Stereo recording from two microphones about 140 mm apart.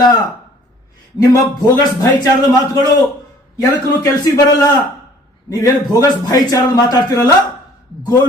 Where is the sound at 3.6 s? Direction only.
25° left (ahead or behind).